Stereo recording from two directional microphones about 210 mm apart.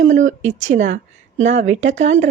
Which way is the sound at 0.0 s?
35° right (ahead or behind).